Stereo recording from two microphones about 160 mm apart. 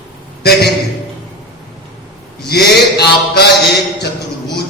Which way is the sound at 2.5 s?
85° left.